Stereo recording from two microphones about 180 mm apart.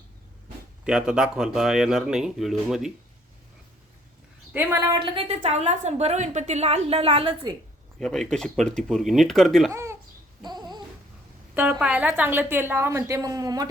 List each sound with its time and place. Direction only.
0.9 s speech: 5° right (ahead or behind)
4.5 s a woman's voice: 10° right (ahead or behind); by 7.5 s 30° right (ahead or behind)
7.9 s speech: 5° left (ahead or behind)
9.7 s a sound: 15° right (ahead or behind)
10.4 s babbling: 25° right (ahead or behind)
11.5 s a woman's voice: 10° right (ahead or behind)